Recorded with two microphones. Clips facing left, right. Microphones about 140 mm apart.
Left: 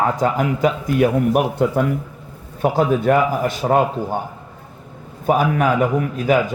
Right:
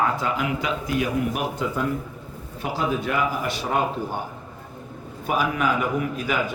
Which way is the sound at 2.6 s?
50° left (ahead or behind).